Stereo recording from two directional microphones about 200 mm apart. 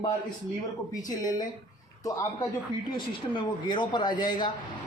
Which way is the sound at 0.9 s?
20° left (ahead or behind).